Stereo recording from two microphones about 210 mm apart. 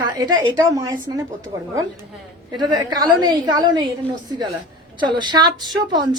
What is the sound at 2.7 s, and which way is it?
A woman's voice, 20° right (ahead or behind).